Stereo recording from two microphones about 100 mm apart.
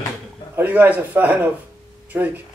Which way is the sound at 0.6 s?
20° right (ahead or behind).